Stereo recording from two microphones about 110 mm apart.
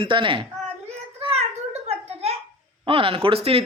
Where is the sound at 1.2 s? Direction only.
70° right (ahead or behind).